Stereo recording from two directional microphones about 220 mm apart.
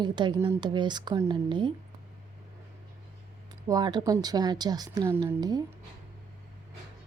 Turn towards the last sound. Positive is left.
turn(degrees=-20)  # may be behind; listen again after turning